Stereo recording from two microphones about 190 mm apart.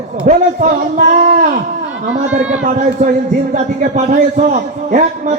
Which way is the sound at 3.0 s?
40° right (ahead or behind).